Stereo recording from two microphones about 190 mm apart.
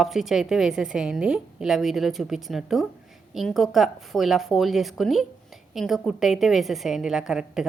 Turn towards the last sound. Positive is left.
turn(degrees=-5)  # may be behind; listen again after turning